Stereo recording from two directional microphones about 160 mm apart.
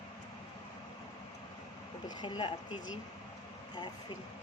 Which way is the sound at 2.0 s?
30° left (ahead or behind).